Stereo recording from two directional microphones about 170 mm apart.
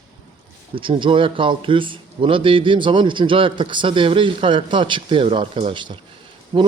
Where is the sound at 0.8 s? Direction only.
30° right (ahead or behind).